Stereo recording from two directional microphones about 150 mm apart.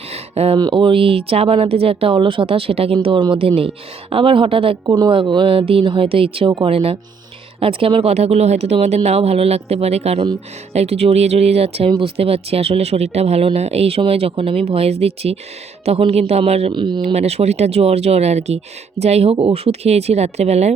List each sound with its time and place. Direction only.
0.1 s a sound: 40° right (ahead or behind)
0.6 s speech: 35° right (ahead or behind)
17.0 s speech: 45° right (ahead or behind)